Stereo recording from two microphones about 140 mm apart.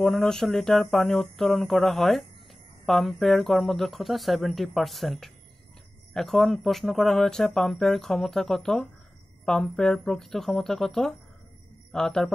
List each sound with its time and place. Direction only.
0.0 s speech: 5° left (ahead or behind)